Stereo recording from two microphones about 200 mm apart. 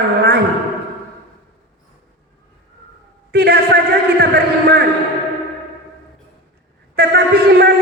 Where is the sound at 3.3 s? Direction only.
50° right (ahead or behind).